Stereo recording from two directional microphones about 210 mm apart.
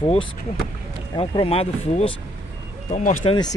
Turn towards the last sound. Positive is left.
turn(degrees=20)  # may be behind; listen again after turning